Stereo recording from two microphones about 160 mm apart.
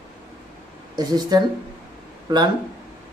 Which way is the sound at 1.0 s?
25° right (ahead or behind).